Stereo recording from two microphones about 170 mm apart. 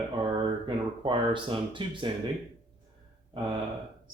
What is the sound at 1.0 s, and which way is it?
Speech, 30° right (ahead or behind).